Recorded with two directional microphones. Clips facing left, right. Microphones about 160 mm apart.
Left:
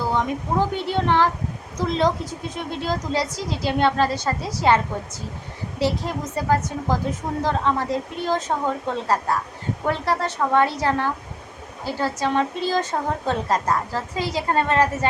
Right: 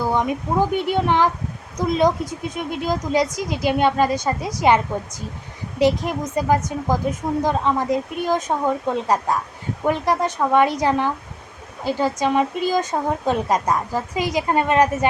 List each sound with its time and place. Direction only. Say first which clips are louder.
0.0 s speech: right 2 dB; 15° right (ahead or behind)
5.8 s speech: right 5 dB; 15° right (ahead or behind)